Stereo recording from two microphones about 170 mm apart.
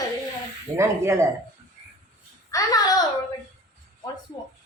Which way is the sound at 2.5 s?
20° left (ahead or behind).